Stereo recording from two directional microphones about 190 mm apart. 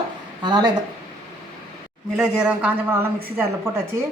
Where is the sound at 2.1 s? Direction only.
5° right (ahead or behind).